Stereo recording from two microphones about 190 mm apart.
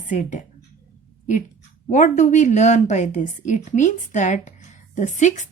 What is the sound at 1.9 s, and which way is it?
A woman's voice, 40° left (ahead or behind).